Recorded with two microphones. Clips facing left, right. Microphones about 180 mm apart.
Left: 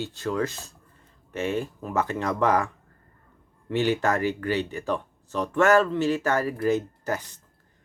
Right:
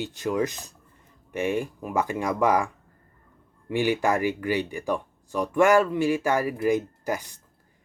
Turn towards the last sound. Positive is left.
turn(degrees=-10)  # may be behind; listen again after turning